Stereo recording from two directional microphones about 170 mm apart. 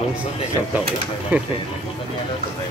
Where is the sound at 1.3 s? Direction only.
10° right (ahead or behind).